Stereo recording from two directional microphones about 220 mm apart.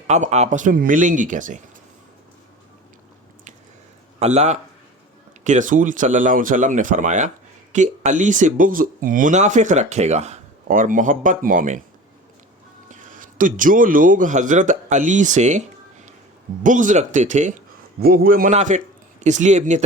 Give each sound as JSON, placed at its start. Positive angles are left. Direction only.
{"t": 0.1, "sound": "speech", "side_deg": -30}
{"t": 4.2, "sound": "speech", "side_deg": -30}
{"t": 12.9, "sound": "a man's voice", "side_deg": -35}
{"t": 16.6, "sound": "speech", "side_deg": -35}